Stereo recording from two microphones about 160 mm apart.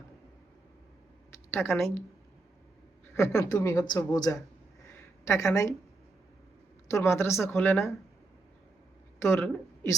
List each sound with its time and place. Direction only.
1.5 s speech: 15° left (ahead or behind)
3.2 s speech: 20° left (ahead or behind)
4.9 s a sound: 15° left (ahead or behind)
6.9 s speech: 15° left (ahead or behind)
9.2 s speech: 15° left (ahead or behind)